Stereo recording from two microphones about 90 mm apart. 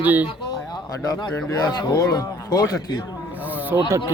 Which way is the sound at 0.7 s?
45° left (ahead or behind).